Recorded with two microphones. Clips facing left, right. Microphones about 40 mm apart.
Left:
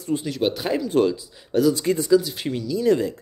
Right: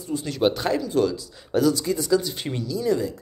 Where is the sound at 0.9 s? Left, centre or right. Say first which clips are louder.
Left 2 dB; left.